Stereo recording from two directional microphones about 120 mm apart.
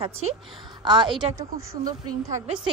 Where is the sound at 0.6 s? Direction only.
40° right (ahead or behind).